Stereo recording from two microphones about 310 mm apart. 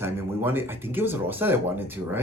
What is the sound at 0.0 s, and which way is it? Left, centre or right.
Speech, centre.